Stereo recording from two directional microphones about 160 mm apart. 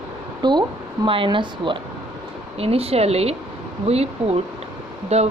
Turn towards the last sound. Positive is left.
turn(degrees=-40)  # may be behind; listen again after turning